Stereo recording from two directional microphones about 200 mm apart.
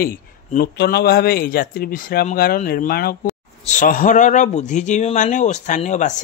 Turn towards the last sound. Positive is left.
turn(degrees=35)  # may be behind; listen again after turning